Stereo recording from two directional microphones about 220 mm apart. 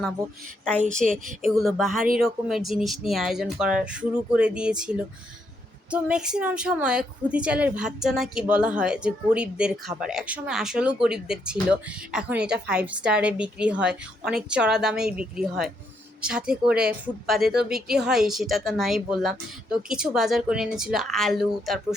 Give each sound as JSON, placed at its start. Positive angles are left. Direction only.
{"t": 1.0, "sound": "speech", "side_deg": 0}